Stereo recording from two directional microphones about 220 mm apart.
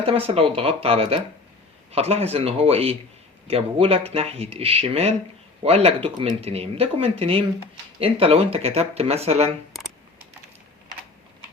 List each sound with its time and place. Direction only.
0.0 s speech: 25° right (ahead or behind)